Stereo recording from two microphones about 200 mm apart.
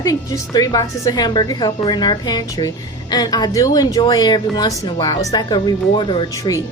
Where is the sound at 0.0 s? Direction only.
15° left (ahead or behind).